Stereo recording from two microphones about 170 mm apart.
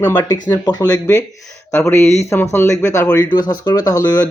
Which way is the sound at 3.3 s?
25° left (ahead or behind).